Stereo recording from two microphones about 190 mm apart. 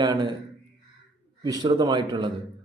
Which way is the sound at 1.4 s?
20° right (ahead or behind).